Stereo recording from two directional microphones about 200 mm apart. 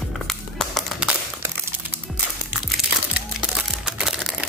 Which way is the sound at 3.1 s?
5° right (ahead or behind).